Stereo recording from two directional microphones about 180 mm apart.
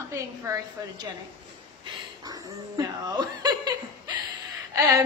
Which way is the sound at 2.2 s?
20° right (ahead or behind).